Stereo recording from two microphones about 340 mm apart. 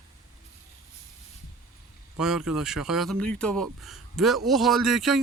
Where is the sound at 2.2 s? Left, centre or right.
Centre.